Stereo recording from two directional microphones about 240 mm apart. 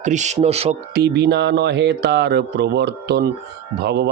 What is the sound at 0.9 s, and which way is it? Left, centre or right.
Speech, right.